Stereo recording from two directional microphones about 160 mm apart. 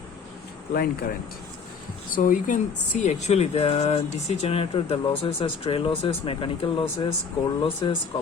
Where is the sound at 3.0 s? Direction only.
40° left (ahead or behind).